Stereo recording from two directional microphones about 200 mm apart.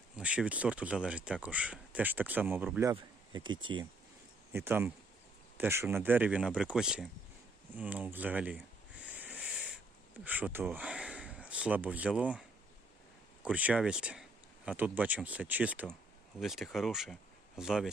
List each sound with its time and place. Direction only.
0.2 s speech: 5° right (ahead or behind)
2.9 s speech: 25° right (ahead or behind)
4.5 s speech: 10° right (ahead or behind)
9.0 s a sound: 5° right (ahead or behind)
10.2 s speech: 10° right (ahead or behind)